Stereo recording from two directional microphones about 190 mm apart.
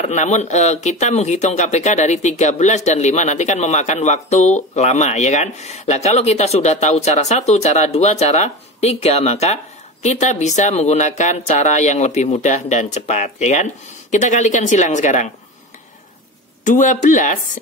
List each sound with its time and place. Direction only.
0.0 s speech: 40° left (ahead or behind)
16.6 s speech: 40° left (ahead or behind)